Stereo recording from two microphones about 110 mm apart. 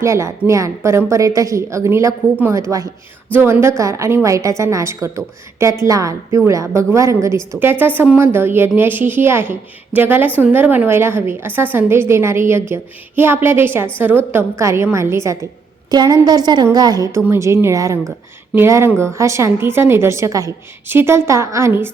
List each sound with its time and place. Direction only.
0.0 s a woman's voice: 25° right (ahead or behind)
15.9 s a woman's voice: 40° right (ahead or behind)
17.2 s a woman's voice: 25° right (ahead or behind)